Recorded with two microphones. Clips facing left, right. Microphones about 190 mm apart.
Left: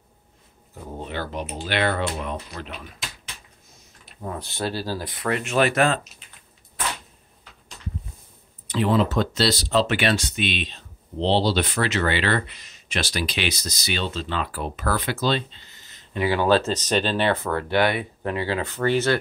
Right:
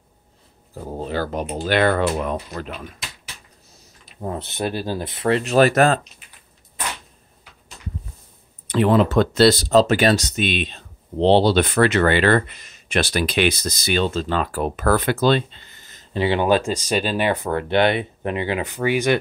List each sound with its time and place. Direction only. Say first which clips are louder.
0.8 s speech: right 6 dB; 35° right (ahead or behind)
4.2 s speech: right 4 dB; 25° right (ahead or behind); by 5.9 s 40° right (ahead or behind)
8.6 s speech: right 4 dB; 60° right (ahead or behind)
16.1 s speech: right 2 dB; 25° right (ahead or behind)